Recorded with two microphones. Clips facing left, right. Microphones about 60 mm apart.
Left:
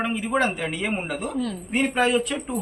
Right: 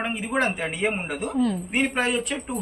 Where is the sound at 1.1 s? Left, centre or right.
Centre.